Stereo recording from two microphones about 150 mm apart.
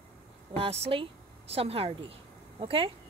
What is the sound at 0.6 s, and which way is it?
Speech, 40° right (ahead or behind).